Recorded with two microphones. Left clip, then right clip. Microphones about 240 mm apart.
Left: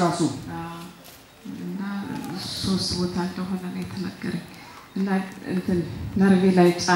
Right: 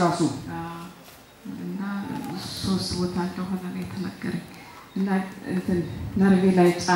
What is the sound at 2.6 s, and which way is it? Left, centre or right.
Speech, left.